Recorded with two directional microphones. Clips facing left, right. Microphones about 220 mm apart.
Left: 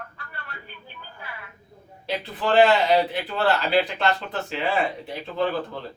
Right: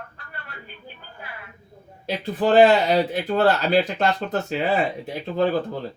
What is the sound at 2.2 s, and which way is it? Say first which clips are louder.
Speech: right 4 dB; 45° right (ahead or behind).